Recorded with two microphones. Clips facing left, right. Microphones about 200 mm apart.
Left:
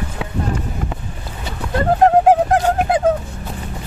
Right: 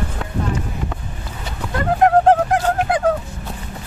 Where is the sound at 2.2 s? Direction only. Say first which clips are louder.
Left 1 dB; 10° left (ahead or behind).